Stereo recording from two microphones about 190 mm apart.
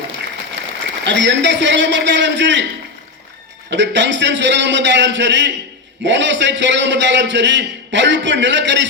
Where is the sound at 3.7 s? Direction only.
70° right (ahead or behind).